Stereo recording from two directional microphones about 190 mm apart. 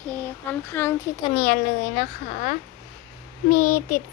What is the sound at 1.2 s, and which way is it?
A child's voice, 40° left (ahead or behind).